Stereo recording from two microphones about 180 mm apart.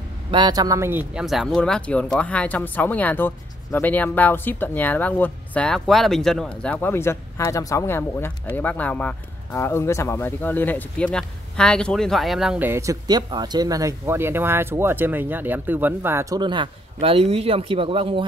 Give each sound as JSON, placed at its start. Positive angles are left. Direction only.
{"t": 0.3, "sound": "speech", "side_deg": -25}
{"t": 16.3, "sound": "a man's voice", "side_deg": -25}